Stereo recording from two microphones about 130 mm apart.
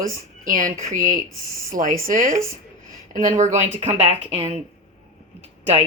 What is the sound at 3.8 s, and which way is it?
Speech, 55° right (ahead or behind).